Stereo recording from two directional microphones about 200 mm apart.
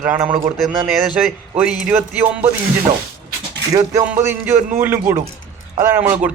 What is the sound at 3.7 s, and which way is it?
Speech, 15° right (ahead or behind).